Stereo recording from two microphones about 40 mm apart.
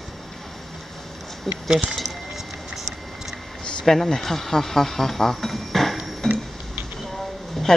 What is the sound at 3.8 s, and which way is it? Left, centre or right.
Speech, centre.